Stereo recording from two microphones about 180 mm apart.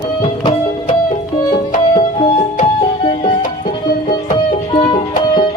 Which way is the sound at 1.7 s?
45° left (ahead or behind).